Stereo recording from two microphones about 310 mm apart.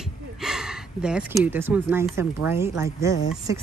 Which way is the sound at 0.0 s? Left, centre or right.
Centre.